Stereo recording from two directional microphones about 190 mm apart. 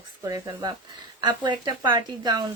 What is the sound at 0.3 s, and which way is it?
Speech, 20° right (ahead or behind).